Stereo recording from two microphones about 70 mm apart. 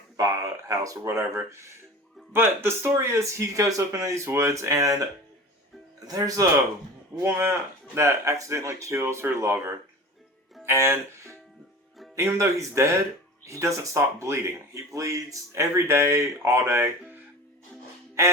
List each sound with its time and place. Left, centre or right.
0.2 s speech: right
6.1 s speech: right
7.2 s speech: right
10.7 s speech: right